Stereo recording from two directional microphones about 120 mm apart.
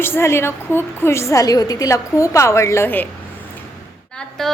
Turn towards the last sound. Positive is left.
turn(degrees=5)  # may be behind; listen again after turning